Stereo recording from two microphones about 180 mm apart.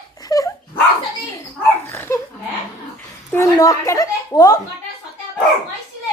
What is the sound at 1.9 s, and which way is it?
Dog, 15° left (ahead or behind).